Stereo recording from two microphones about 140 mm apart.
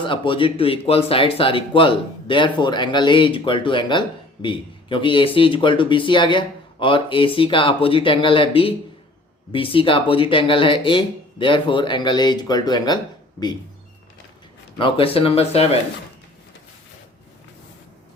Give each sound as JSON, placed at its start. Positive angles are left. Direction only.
{"t": 0.0, "sound": "speech", "side_deg": 35}
{"t": 14.8, "sound": "speech", "side_deg": 40}